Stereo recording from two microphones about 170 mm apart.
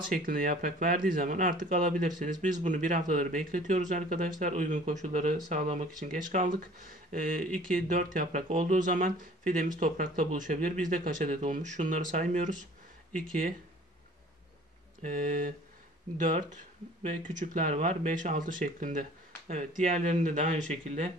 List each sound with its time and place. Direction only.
0.0 s speech: 55° right (ahead or behind)
15.0 s speech: 50° right (ahead or behind)